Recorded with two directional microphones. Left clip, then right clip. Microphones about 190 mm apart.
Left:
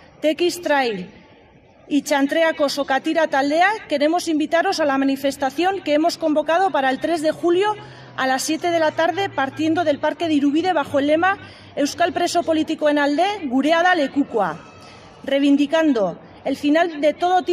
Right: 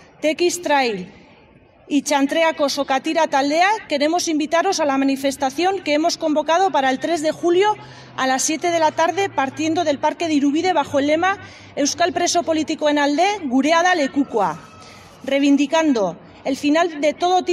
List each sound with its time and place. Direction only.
0.2 s a woman's voice: 20° right (ahead or behind)